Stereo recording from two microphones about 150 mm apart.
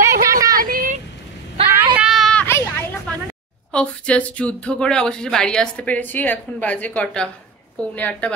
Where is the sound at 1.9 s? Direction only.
5° right (ahead or behind).